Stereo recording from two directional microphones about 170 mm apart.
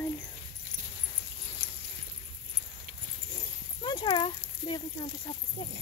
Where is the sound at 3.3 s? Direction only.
25° left (ahead or behind).